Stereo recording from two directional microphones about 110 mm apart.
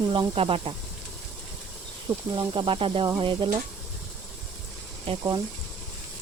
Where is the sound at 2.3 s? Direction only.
50° right (ahead or behind).